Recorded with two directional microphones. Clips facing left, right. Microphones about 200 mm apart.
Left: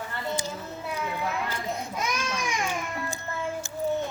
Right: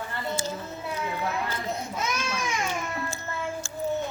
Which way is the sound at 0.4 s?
15° left (ahead or behind).